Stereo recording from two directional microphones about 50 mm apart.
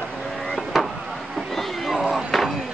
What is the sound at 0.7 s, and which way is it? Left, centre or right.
Vehicle, centre.